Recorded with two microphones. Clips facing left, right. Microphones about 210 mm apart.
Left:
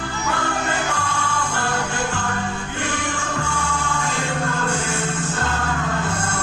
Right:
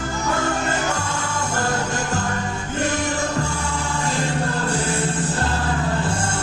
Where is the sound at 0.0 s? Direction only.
45° right (ahead or behind).